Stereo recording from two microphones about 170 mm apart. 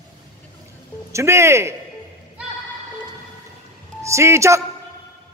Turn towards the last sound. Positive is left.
turn(degrees=-15)  # may be behind; listen again after turning